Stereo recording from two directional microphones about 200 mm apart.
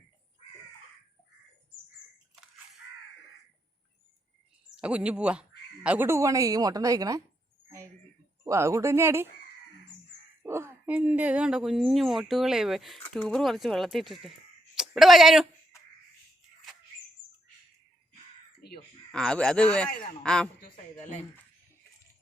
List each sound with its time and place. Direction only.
4.7 s speech: 5° right (ahead or behind)
8.4 s speech: 15° right (ahead or behind)
10.4 s speech: 15° right (ahead or behind)
19.1 s speech: 5° left (ahead or behind)
20.6 s a sound: 40° left (ahead or behind)